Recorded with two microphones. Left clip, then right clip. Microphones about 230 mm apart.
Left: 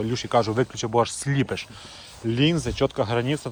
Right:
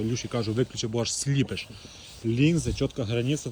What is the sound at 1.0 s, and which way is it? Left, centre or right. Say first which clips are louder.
Speech: left 7 dB; centre.